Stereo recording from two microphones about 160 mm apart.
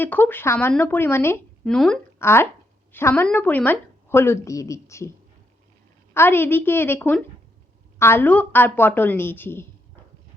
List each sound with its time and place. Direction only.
0.0 s a woman's voice: 10° left (ahead or behind)
1.6 s speech: 5° left (ahead or behind)
2.1 s a woman's voice: 15° left (ahead or behind)
6.1 s a woman's voice: 15° left (ahead or behind)